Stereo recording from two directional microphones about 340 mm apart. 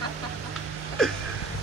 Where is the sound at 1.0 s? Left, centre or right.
Centre.